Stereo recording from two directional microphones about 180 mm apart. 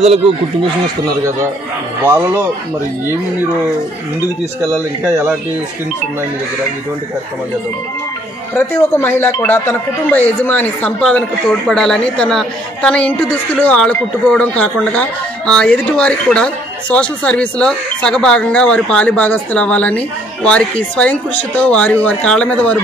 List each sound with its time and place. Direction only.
2.0 s speech: 20° right (ahead or behind)
5.0 s speech: 15° right (ahead or behind)
8.5 s speech: 15° left (ahead or behind)